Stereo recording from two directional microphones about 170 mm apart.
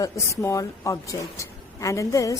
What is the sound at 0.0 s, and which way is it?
A woman's voice, 20° left (ahead or behind).